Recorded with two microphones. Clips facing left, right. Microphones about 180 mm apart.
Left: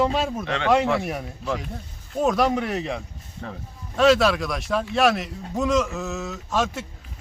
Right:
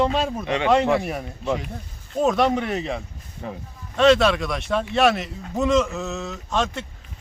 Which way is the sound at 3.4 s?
15° right (ahead or behind).